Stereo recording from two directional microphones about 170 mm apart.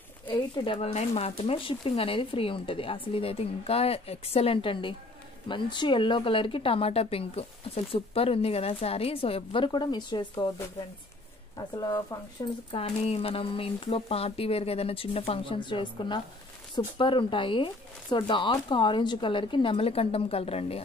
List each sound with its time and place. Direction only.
0.3 s speech: 35° left (ahead or behind)
11.5 s speech: 25° left (ahead or behind)
12.7 s speech: 35° left (ahead or behind)